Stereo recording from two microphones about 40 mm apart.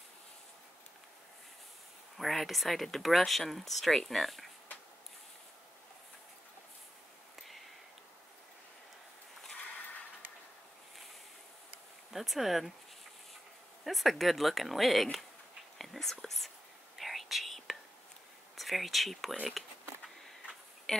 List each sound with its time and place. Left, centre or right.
2.1 s speech: centre
7.3 s a sound: centre
12.1 s speech: centre
13.8 s speech: centre
15.8 s whispering: centre
18.6 s speech: centre
20.9 s speech: centre